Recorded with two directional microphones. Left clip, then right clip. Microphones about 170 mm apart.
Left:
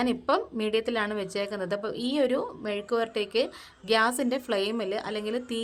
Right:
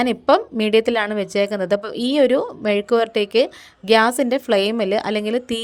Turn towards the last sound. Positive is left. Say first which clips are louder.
# right 10 dB
turn(degrees=-35)  # may be behind; listen again after turning